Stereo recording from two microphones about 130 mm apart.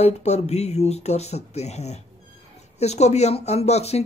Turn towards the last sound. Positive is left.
turn(degrees=55)  # may be behind; listen again after turning